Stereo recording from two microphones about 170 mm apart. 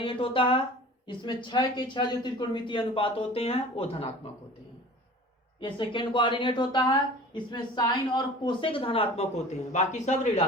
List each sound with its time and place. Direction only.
0.0 s speech: 30° left (ahead or behind)
5.5 s speech: 30° left (ahead or behind); by 10.4 s 45° left (ahead or behind)